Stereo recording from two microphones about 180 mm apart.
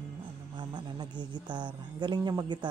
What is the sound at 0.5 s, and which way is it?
Speech, 25° right (ahead or behind).